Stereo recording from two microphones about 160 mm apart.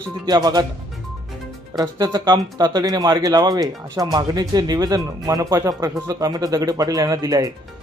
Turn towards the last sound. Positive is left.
turn(degrees=-20)  # may be behind; listen again after turning